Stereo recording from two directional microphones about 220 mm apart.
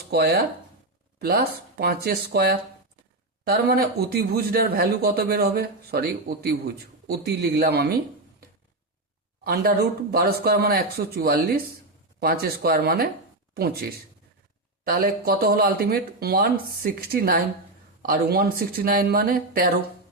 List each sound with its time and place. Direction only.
0.1 s a man's voice: 45° right (ahead or behind)
9.4 s a man's voice: 45° right (ahead or behind)
14.8 s a man's voice: 40° right (ahead or behind)